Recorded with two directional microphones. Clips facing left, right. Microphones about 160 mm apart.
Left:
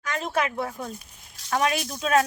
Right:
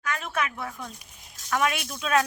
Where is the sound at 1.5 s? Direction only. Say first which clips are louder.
Left 2 dB; 30° left (ahead or behind).